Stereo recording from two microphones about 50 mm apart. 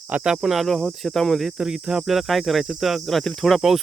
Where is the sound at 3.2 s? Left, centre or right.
Centre.